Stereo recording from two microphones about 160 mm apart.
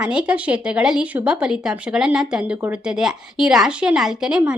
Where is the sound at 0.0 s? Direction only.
5° right (ahead or behind).